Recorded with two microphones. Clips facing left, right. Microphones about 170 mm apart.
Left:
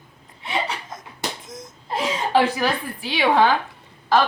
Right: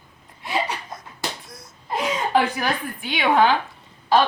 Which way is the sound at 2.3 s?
30° left (ahead or behind).